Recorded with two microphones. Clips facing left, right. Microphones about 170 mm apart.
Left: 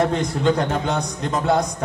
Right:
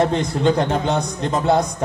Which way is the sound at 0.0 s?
25° right (ahead or behind).